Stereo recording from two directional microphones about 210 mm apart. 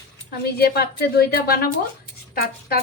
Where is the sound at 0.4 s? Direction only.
50° left (ahead or behind).